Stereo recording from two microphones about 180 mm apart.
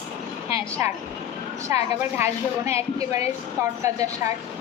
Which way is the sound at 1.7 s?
10° right (ahead or behind).